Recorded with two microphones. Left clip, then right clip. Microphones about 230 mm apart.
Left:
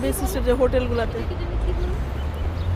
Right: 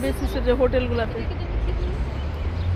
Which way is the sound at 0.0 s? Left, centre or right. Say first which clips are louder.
Left 1 dB; centre.